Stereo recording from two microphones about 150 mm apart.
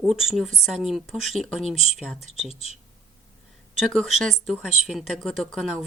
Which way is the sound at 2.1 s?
40° left (ahead or behind).